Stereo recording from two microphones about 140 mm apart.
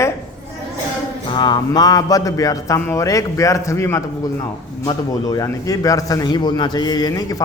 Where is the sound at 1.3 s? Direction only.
30° left (ahead or behind).